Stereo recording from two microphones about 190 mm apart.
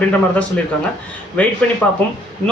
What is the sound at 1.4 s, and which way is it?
Speech, 10° left (ahead or behind).